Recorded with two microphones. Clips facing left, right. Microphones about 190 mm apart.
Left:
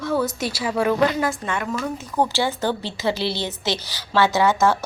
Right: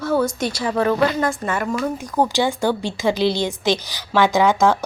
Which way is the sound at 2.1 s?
15° right (ahead or behind).